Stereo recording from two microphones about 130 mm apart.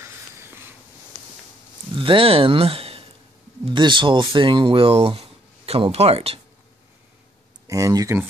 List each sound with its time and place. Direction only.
0.0 s a sound: 20° right (ahead or behind)
2.0 s speech: 40° right (ahead or behind)
7.6 s speech: 25° right (ahead or behind)